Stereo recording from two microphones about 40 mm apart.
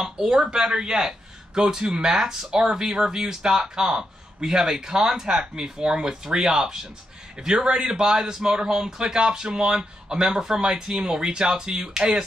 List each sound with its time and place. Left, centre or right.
0.0 s speech: centre
11.7 s speech: centre